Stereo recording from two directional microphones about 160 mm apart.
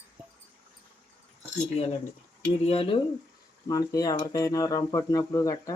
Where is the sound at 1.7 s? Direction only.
40° left (ahead or behind).